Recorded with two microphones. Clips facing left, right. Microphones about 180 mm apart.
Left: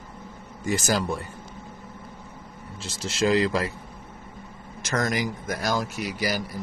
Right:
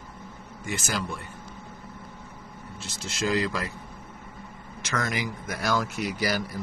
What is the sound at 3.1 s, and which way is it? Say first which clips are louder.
Speech: left 5 dB; 30° left (ahead or behind).